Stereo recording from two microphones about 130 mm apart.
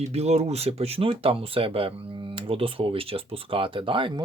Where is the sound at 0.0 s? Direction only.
55° right (ahead or behind).